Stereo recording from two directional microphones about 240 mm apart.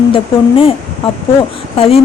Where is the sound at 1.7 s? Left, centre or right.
Left.